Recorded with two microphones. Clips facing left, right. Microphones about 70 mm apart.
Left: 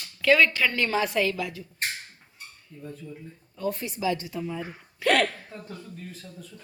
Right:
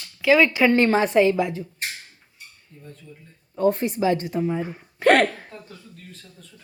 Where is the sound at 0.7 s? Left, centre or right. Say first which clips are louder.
Right 8 dB; right.